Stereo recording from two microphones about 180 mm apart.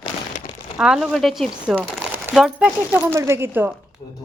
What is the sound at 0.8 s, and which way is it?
Speech, 5° right (ahead or behind).